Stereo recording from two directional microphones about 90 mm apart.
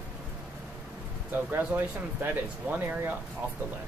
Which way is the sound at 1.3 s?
20° right (ahead or behind).